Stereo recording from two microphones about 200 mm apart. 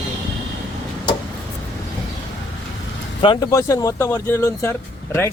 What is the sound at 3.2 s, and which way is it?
Speech, 20° left (ahead or behind).